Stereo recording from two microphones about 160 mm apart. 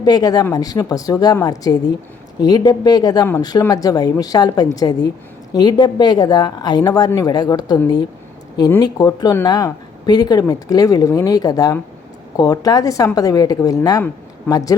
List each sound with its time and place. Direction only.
0.0 s speech: 25° left (ahead or behind)